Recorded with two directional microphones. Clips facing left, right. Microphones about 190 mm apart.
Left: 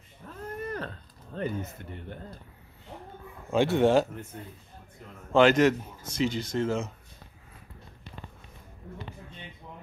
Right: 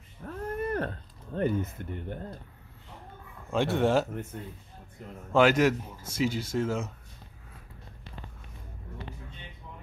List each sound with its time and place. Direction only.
0.2 s a sound: 50° right (ahead or behind)
3.5 s speech: centre (ahead or behind)
5.3 s speech: 5° right (ahead or behind)